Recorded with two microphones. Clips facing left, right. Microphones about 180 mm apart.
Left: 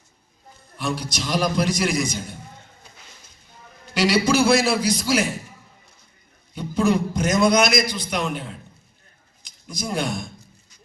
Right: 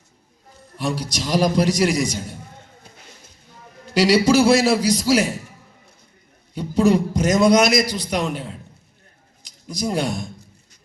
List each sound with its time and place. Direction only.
0.8 s a man's voice: 40° right (ahead or behind)
3.9 s a man's voice: 40° right (ahead or behind)
6.5 s a man's voice: 35° right (ahead or behind)